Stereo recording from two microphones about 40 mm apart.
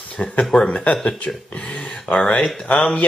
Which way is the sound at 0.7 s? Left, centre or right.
Left.